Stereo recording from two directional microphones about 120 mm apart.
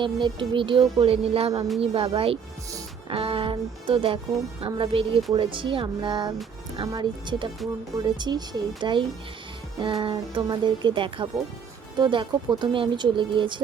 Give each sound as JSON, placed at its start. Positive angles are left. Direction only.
{"t": 0.0, "sound": "music", "side_deg": -45}
{"t": 6.7, "sound": "speech", "side_deg": -40}
{"t": 9.8, "sound": "music", "side_deg": -45}
{"t": 11.9, "sound": "speech", "side_deg": -40}